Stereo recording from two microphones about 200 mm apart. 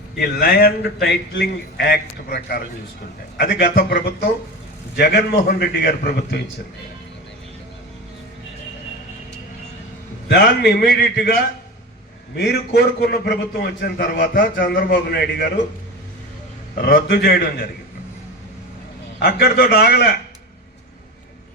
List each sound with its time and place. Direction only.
0.2 s a man's voice: 50° left (ahead or behind)
10.2 s a man's voice: 55° left (ahead or behind)
12.4 s a man's voice: 55° left (ahead or behind)
16.8 s a man's voice: 50° left (ahead or behind)
19.2 s a man's voice: 50° left (ahead or behind)